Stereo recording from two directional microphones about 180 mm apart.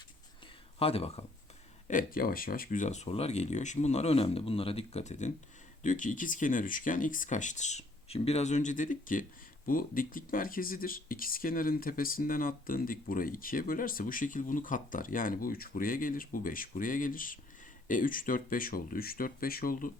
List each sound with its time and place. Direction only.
0.8 s speech: 35° left (ahead or behind)
1.9 s speech: 50° left (ahead or behind)